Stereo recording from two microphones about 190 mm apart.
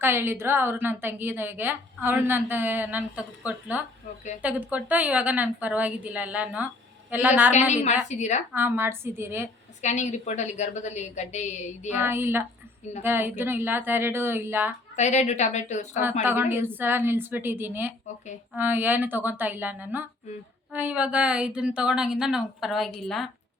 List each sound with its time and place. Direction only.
0.0 s a woman's voice: 10° right (ahead or behind)
7.7 s a woman's voice: 40° left (ahead or behind)
8.5 s a woman's voice: 10° right (ahead or behind)
9.8 s a woman's voice: 40° left (ahead or behind)
11.9 s a woman's voice: 10° right (ahead or behind)
14.9 s a woman's voice: 35° left (ahead or behind)
16.2 s a woman's voice: 10° right (ahead or behind)